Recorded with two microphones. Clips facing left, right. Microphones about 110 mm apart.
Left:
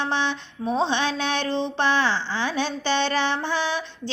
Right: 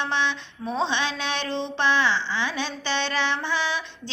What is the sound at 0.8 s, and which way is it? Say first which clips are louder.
Speech: left 1 dB; 40° left (ahead or behind).